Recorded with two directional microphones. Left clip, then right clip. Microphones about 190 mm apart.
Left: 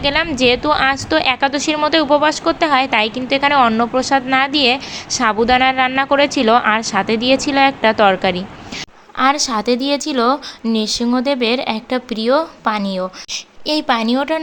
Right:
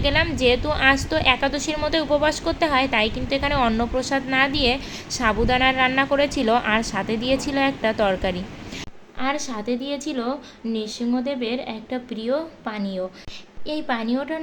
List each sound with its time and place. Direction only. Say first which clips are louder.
0.0 s a woman's voice: left 5 dB; 15° left (ahead or behind)